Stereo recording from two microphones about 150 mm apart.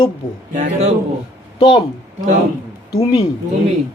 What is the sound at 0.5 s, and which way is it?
Speech, 50° right (ahead or behind).